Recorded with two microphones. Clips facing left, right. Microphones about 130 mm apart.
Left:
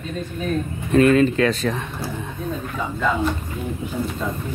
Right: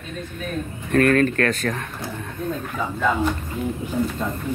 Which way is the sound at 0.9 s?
15° left (ahead or behind).